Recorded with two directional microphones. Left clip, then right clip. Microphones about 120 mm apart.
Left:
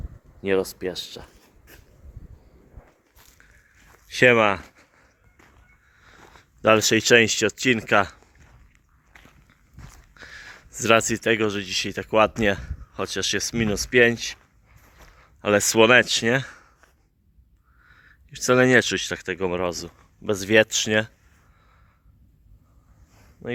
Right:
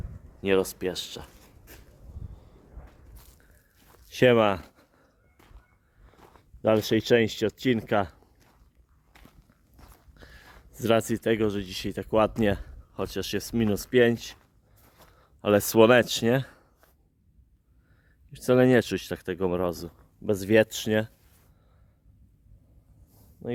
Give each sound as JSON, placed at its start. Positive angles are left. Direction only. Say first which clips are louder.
{"t": 0.4, "sound": "speech", "louder": "left 1 dB", "side_deg": -20}
{"t": 4.1, "sound": "speech", "louder": "left 4 dB", "side_deg": -35}
{"t": 6.1, "sound": "a sound", "louder": "left 4 dB", "side_deg": 5}
{"t": 6.6, "sound": "speech", "louder": "left 6 dB", "side_deg": -10}
{"t": 9.1, "sound": "walk", "louder": "left 5 dB", "side_deg": 0}
{"t": 10.2, "sound": "speech", "louder": "left 10 dB", "side_deg": -20}
{"t": 16.3, "sound": "speech", "louder": "left 3 dB", "side_deg": -30}
{"t": 17.8, "sound": "speech", "louder": "left 12 dB", "side_deg": -20}
{"t": 20.2, "sound": "speech", "louder": "left 3 dB", "side_deg": -35}